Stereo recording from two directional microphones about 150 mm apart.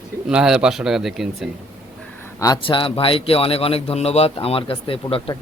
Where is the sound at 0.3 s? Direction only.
5° right (ahead or behind).